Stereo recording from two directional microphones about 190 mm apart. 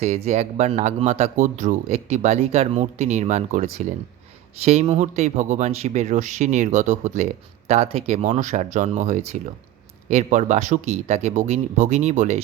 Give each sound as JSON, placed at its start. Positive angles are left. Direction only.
{"t": 0.0, "sound": "speech", "side_deg": -35}